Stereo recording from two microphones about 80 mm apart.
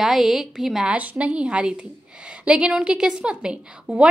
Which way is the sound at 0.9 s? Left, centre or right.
Centre.